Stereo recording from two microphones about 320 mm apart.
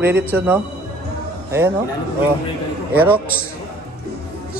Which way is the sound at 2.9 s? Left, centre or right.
Centre.